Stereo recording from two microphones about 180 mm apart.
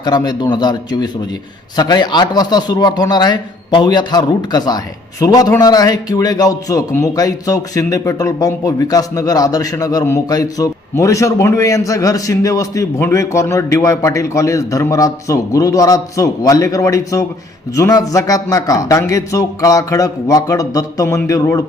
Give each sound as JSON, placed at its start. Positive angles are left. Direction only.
{"t": 0.0, "sound": "a man's voice", "side_deg": 20}